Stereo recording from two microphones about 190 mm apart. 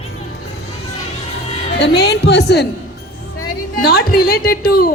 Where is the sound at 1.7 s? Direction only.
60° left (ahead or behind).